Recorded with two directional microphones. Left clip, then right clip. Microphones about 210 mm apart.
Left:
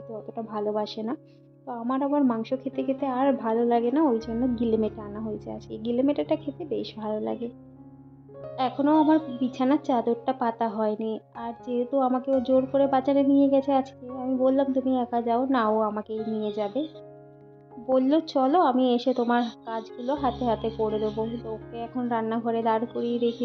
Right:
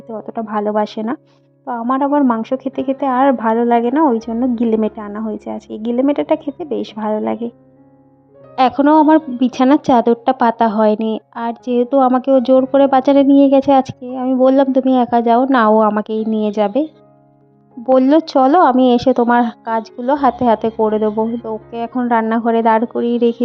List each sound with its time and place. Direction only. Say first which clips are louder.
0.1 s speech: right 13 dB; 40° right (ahead or behind)
8.5 s a woman's voice: right 12 dB; 45° right (ahead or behind)
17.9 s speech: right 11 dB; 40° right (ahead or behind)